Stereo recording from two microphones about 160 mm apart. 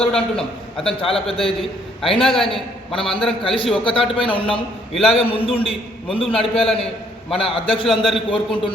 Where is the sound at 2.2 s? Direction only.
Centre (ahead or behind).